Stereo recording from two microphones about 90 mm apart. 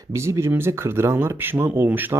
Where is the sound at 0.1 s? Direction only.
30° right (ahead or behind).